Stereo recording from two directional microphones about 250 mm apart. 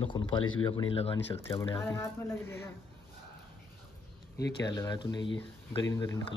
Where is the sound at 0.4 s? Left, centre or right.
Left.